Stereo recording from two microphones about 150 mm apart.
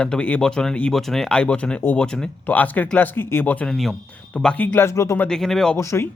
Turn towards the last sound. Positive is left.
turn(degrees=20)  # may be behind; listen again after turning